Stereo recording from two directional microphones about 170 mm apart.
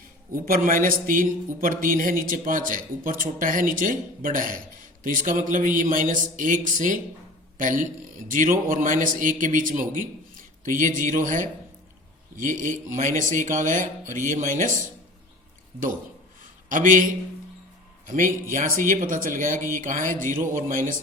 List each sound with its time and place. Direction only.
0.3 s a man's voice: 55° right (ahead or behind)
16.6 s a man's voice: 50° right (ahead or behind)